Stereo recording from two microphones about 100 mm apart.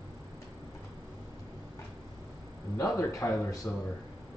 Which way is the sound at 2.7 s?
35° left (ahead or behind).